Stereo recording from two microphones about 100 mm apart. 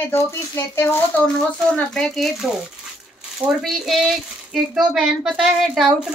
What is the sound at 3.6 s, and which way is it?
Speech, centre (ahead or behind).